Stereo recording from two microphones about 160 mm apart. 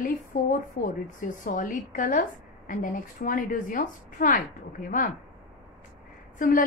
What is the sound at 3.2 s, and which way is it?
A woman's voice, 60° left (ahead or behind).